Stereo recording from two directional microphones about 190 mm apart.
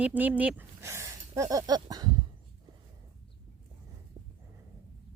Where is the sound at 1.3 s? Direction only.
20° right (ahead or behind).